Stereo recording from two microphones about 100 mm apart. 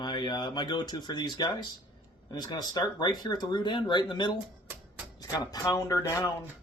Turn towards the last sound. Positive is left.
turn(degrees=30)  # may be behind; listen again after turning